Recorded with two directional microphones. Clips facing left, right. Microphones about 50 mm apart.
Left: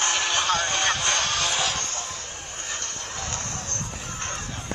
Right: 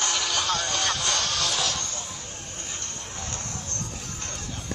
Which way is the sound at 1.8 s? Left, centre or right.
Left.